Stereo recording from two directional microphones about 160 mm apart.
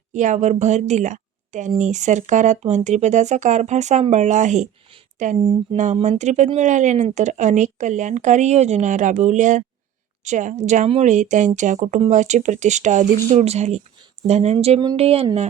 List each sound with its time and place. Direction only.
0.1 s a woman's voice: 50° right (ahead or behind)